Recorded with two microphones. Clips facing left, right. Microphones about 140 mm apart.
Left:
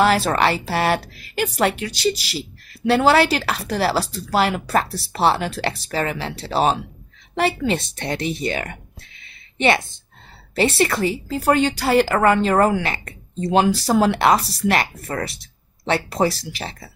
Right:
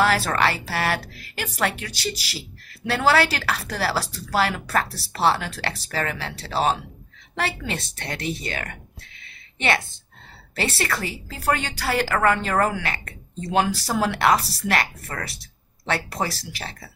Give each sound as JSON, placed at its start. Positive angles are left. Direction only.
{"t": 0.0, "sound": "a woman's voice", "side_deg": 20}